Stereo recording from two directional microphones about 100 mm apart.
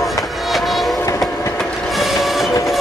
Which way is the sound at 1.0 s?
30° left (ahead or behind).